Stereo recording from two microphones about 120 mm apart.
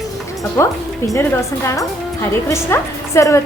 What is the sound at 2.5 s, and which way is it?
Speech, 25° left (ahead or behind).